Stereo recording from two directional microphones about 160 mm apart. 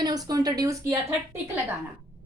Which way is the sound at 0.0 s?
25° right (ahead or behind).